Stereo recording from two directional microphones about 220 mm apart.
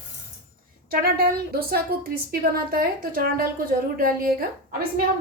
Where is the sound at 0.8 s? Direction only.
40° right (ahead or behind).